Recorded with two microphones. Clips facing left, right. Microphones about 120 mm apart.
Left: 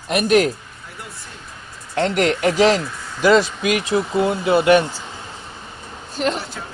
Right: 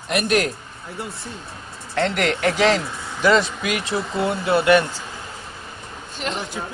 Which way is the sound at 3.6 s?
20° left (ahead or behind).